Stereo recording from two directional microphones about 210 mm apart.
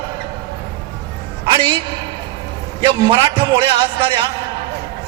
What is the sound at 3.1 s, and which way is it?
A man's voice, 25° right (ahead or behind).